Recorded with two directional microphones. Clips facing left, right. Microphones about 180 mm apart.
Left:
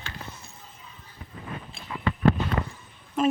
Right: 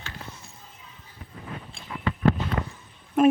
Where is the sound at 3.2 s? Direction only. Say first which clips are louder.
Right 5 dB; 60° right (ahead or behind).